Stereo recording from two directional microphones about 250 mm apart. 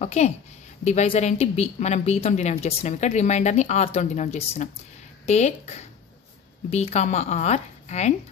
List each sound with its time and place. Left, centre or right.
0.0 s speech: left